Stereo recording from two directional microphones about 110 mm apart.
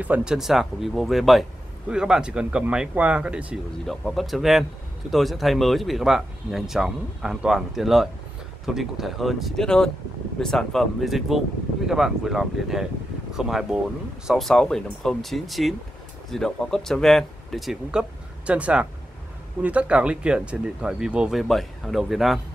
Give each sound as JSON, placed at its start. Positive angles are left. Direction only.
{"t": 0.0, "sound": "speech", "side_deg": -10}
{"t": 3.8, "sound": "speech", "side_deg": 5}
{"t": 18.5, "sound": "speech", "side_deg": -10}